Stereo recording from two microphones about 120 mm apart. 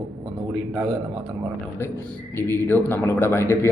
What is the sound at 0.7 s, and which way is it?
Speech, 30° right (ahead or behind).